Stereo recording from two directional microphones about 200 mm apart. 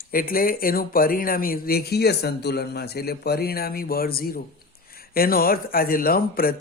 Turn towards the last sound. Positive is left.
turn(degrees=45)  # may be behind; listen again after turning